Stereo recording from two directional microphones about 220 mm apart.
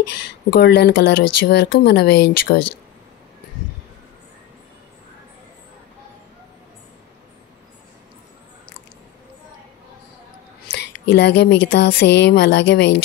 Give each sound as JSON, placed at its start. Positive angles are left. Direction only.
{"t": 0.1, "sound": "speech", "side_deg": 50}
{"t": 10.7, "sound": "speech", "side_deg": 50}